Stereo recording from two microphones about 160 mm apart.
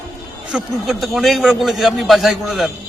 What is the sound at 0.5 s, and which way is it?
A man's voice, centre (ahead or behind).